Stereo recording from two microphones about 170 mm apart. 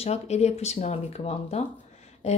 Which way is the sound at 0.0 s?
40° left (ahead or behind).